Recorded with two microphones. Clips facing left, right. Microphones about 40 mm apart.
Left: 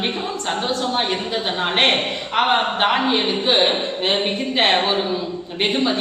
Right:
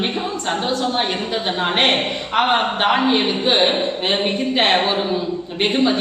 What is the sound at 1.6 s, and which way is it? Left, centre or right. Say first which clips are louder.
A woman's voice: even; centre.